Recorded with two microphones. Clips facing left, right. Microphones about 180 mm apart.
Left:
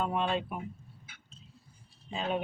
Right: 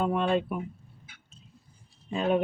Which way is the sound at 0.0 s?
55° right (ahead or behind).